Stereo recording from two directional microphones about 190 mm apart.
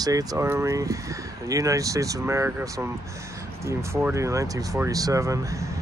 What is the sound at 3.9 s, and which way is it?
Speech, 15° right (ahead or behind).